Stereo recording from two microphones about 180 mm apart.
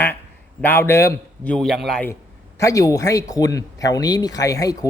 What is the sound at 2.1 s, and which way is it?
Speech, 15° left (ahead or behind).